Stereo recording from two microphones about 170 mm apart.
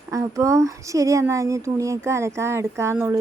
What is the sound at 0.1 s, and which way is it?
A woman's voice, 20° right (ahead or behind).